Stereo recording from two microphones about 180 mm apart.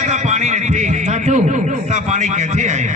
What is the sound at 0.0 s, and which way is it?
A man's voice, 40° right (ahead or behind).